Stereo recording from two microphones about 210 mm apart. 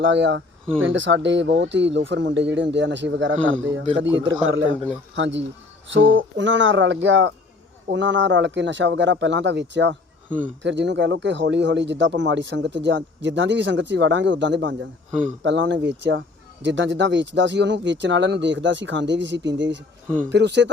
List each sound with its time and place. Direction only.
0.0 s speech: 60° right (ahead or behind)